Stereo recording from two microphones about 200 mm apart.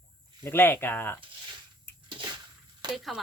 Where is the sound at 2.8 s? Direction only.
20° right (ahead or behind).